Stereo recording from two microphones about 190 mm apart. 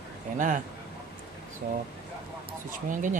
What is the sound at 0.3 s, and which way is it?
Speech, 45° right (ahead or behind).